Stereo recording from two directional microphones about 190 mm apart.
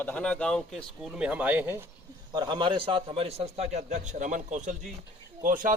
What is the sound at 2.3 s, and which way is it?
A man's voice, 25° right (ahead or behind).